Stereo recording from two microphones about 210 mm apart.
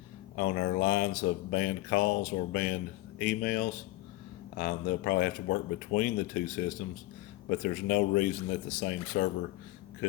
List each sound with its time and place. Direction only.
0.3 s speech: 45° left (ahead or behind)